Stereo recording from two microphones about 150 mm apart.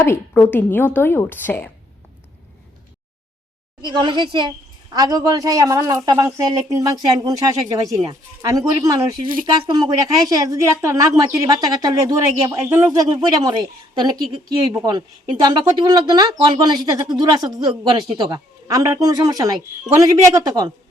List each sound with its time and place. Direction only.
0.0 s a woman's voice: 15° left (ahead or behind)
3.8 s speech: 30° right (ahead or behind)
10.2 s speech: 25° right (ahead or behind)